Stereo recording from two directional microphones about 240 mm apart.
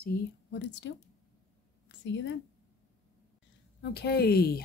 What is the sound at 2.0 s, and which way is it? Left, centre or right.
Speech, left.